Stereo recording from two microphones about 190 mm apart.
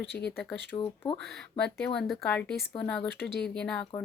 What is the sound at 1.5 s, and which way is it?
A woman's voice, 5° left (ahead or behind).